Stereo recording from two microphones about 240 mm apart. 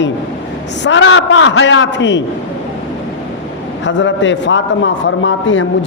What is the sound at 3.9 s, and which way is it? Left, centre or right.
A man's voice, left.